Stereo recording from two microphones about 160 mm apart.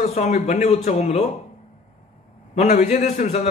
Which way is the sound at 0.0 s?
45° left (ahead or behind).